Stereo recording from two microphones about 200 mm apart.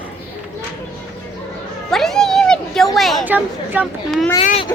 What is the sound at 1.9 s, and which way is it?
Cat, centre (ahead or behind).